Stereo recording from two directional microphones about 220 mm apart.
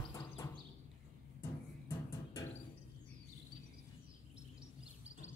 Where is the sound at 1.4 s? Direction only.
10° left (ahead or behind).